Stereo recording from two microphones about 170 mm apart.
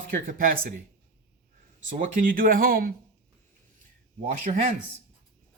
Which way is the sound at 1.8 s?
50° right (ahead or behind).